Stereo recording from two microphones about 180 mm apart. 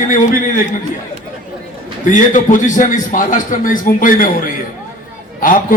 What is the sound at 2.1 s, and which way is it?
A man's voice, 45° left (ahead or behind).